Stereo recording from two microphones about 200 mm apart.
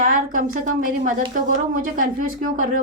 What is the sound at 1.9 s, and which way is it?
Speech, 45° right (ahead or behind).